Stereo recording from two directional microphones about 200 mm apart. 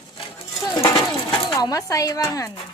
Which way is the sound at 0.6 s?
15° left (ahead or behind).